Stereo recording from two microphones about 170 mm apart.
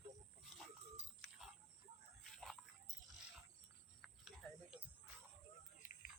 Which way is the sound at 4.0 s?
5° right (ahead or behind).